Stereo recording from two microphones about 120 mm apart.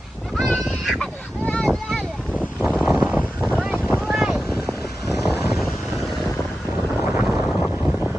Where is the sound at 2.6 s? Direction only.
10° right (ahead or behind).